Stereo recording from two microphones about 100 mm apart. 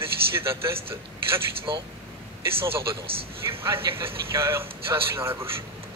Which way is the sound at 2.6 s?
70° right (ahead or behind).